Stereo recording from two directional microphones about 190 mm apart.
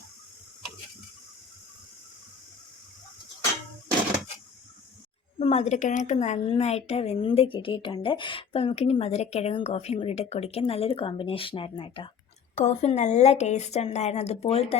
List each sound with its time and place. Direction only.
5.4 s a woman's voice: 35° left (ahead or behind)